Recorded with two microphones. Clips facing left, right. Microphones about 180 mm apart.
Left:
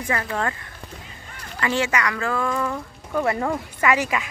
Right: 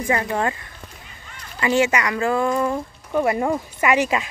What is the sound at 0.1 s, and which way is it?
Speech, 20° right (ahead or behind).